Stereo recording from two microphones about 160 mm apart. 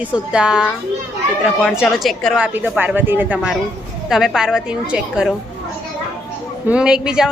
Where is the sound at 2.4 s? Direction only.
10° right (ahead or behind).